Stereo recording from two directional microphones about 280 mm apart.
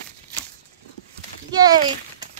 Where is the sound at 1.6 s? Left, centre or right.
Centre.